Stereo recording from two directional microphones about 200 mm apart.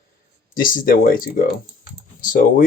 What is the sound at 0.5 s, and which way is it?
Speech, 45° left (ahead or behind).